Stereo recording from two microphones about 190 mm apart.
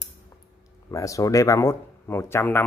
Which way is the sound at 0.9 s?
15° left (ahead or behind).